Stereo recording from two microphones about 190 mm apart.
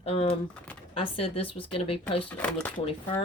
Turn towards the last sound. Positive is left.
turn(degrees=30)  # may be behind; listen again after turning